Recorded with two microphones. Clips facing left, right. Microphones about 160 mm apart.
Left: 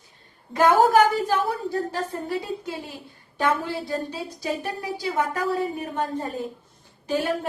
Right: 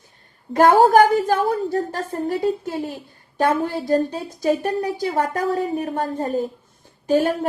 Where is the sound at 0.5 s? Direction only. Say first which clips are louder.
Right 4 dB; 50° right (ahead or behind).